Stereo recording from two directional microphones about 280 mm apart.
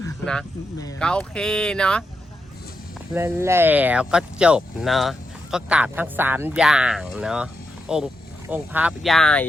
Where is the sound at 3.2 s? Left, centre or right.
Centre.